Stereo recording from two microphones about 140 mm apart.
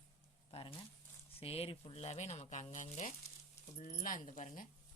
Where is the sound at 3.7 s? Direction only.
65° left (ahead or behind).